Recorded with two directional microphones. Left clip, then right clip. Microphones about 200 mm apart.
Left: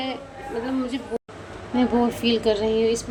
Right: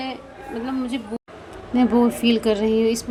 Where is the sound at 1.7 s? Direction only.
25° right (ahead or behind).